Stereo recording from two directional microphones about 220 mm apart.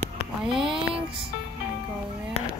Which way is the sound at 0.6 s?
25° right (ahead or behind).